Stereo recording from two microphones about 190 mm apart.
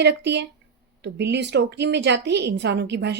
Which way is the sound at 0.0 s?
65° right (ahead or behind).